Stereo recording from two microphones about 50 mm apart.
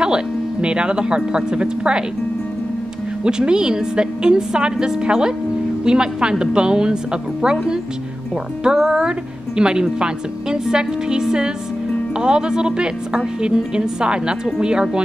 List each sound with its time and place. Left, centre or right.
0.0 s speech: centre
3.3 s a woman's voice: centre
8.6 s a woman's voice: centre